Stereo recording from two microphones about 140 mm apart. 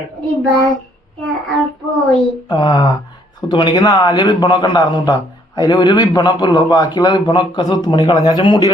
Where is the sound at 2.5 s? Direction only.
35° left (ahead or behind).